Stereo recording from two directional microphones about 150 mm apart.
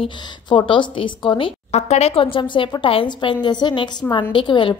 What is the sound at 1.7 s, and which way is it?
Speech, 45° left (ahead or behind).